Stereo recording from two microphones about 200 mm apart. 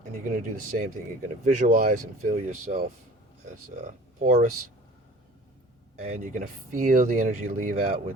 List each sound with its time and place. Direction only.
0.3 s speech: 40° right (ahead or behind)
6.0 s speech: 40° right (ahead or behind)